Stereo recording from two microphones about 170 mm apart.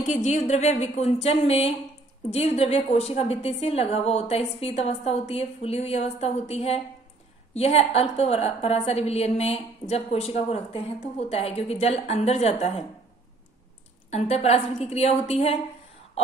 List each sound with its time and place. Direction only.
0.0 s a woman's voice: 45° left (ahead or behind)
14.1 s a woman's voice: 40° left (ahead or behind)